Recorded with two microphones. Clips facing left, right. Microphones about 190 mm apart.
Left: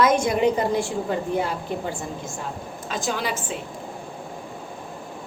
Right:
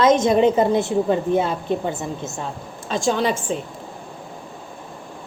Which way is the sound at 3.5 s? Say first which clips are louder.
Right 6 dB; 35° right (ahead or behind).